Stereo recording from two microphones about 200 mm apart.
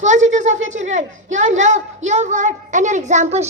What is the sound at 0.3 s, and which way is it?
A woman's voice, 35° right (ahead or behind).